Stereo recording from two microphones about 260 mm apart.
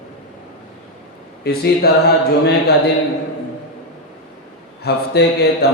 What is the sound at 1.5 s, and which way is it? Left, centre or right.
Mantra, left.